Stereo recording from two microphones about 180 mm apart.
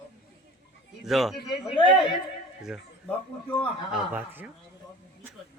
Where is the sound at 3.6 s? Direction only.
5° right (ahead or behind).